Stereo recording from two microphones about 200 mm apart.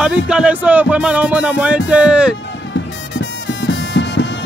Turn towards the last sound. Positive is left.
turn(degrees=65)  # may be behind; listen again after turning